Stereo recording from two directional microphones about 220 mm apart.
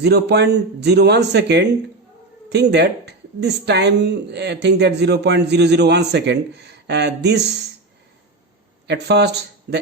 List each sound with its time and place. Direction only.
0.0 s speech: 50° right (ahead or behind)
8.9 s speech: 50° right (ahead or behind)